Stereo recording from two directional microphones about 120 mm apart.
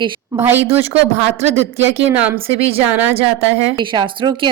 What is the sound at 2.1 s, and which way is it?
Speech, 15° right (ahead or behind).